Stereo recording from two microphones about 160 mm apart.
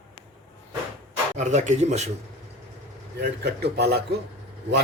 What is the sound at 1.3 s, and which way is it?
Speech, 50° right (ahead or behind).